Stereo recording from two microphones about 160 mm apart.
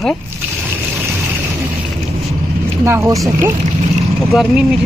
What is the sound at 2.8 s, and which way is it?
Speech, 15° right (ahead or behind).